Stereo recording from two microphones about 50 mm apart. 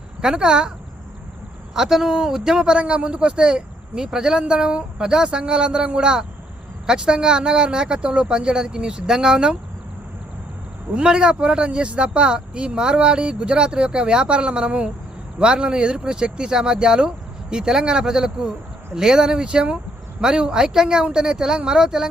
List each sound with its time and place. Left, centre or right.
0.2 s a man's voice: centre
1.7 s a man's voice: centre
10.9 s a man's voice: centre